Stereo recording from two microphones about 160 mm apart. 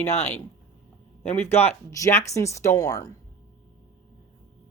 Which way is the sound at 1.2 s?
10° left (ahead or behind).